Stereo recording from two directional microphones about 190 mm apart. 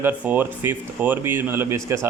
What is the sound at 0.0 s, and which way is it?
Speech, 10° right (ahead or behind).